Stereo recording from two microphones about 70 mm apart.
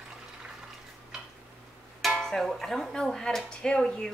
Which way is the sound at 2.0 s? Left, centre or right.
Centre.